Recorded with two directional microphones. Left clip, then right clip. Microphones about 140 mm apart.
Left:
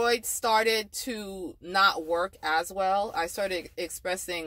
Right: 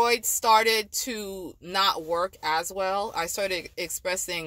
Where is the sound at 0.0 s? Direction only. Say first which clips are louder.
Right 3 dB; 15° right (ahead or behind).